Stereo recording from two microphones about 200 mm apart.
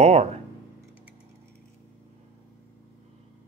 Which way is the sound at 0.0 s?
30° right (ahead or behind).